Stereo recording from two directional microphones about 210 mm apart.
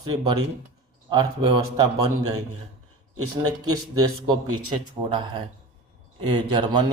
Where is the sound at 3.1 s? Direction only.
90° right.